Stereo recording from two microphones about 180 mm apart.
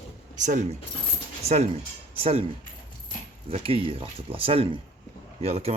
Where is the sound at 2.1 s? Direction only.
35° right (ahead or behind).